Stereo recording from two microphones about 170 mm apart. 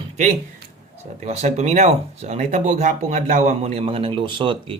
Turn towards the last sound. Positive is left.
turn(degrees=-30)  # may be behind; listen again after turning